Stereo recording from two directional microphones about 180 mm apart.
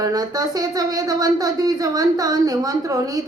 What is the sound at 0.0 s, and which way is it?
Speech, 20° right (ahead or behind).